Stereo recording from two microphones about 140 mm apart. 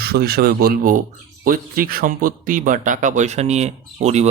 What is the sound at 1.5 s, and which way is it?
Speech, 90° right.